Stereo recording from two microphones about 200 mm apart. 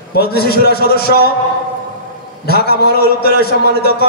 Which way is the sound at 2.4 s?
55° left (ahead or behind).